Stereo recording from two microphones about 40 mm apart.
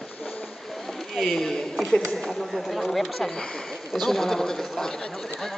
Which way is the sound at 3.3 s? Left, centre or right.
Centre.